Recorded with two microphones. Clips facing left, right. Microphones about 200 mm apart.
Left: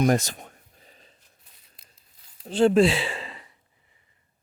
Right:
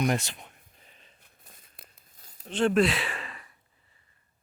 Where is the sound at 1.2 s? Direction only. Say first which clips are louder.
Right 4 dB; 50° right (ahead or behind).